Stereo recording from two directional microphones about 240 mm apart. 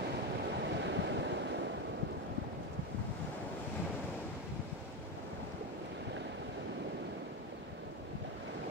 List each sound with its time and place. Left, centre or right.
0.6 s waves: right